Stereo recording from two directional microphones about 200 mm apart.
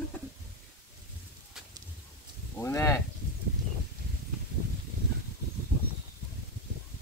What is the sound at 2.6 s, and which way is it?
Speech, 15° left (ahead or behind).